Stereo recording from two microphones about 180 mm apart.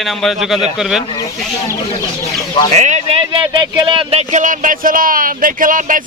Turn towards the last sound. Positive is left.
turn(degrees=-50)  # may be behind; listen again after turning